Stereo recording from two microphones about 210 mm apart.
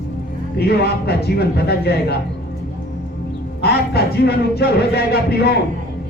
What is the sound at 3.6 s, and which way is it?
Speech, 50° left (ahead or behind).